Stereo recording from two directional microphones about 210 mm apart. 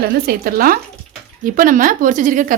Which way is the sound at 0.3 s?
45° right (ahead or behind).